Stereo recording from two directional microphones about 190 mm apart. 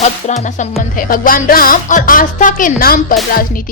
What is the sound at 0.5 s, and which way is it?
Speech, 45° left (ahead or behind).